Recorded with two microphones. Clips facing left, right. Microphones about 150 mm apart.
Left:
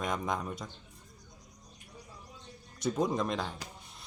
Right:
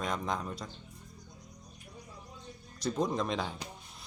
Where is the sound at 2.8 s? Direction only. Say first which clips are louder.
Left 1 dB; centre (ahead or behind).